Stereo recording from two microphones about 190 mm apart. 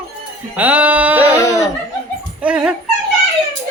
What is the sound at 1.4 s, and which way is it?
Laughter, 15° left (ahead or behind).